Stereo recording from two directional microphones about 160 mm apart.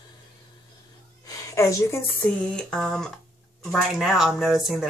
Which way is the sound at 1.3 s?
20° left (ahead or behind).